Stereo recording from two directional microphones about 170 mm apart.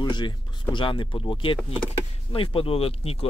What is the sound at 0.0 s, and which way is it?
Speech, 25° left (ahead or behind).